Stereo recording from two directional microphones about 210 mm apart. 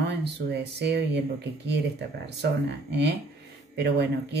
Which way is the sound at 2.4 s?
55° right (ahead or behind).